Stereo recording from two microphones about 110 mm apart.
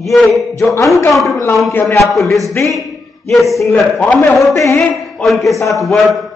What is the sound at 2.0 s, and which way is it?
A man's voice, centre (ahead or behind).